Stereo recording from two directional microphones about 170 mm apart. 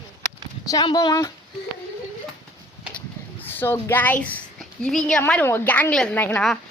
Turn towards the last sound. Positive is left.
turn(degrees=5)  # may be behind; listen again after turning